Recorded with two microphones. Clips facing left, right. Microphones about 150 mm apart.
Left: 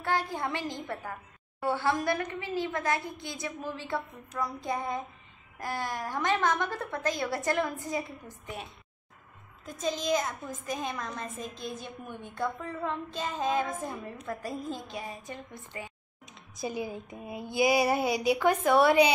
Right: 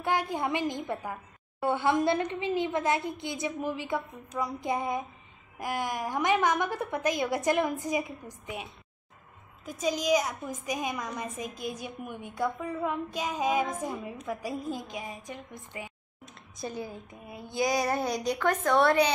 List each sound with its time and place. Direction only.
0.0 s a woman's voice: 20° right (ahead or behind)
9.7 s a woman's voice: 10° right (ahead or behind)
16.3 s speech: 5° left (ahead or behind)